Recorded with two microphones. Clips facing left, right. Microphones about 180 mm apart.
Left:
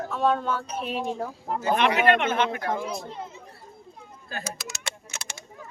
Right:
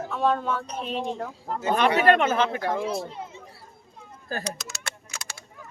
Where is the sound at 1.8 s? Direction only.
35° right (ahead or behind).